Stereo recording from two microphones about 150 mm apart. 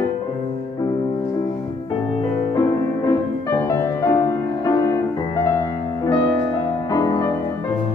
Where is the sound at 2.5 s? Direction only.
25° left (ahead or behind).